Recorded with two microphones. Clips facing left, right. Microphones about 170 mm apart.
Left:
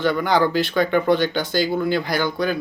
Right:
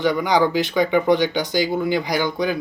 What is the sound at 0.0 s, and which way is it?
Speech, 15° right (ahead or behind).